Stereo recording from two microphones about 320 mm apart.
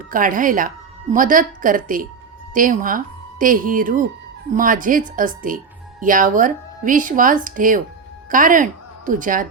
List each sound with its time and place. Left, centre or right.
0.1 s a woman's voice: right